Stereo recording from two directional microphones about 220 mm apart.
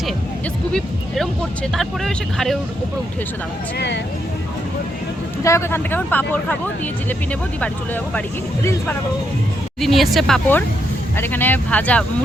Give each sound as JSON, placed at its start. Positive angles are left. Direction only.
{"t": 0.7, "sound": "speech", "side_deg": 0}
{"t": 3.8, "sound": "speech", "side_deg": 50}
{"t": 5.4, "sound": "speech", "side_deg": 15}
{"t": 9.8, "sound": "speech", "side_deg": 0}